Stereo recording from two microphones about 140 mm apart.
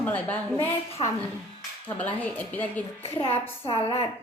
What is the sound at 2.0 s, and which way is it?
Speech, 10° left (ahead or behind).